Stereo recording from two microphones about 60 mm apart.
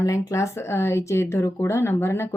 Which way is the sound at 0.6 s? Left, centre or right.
Left.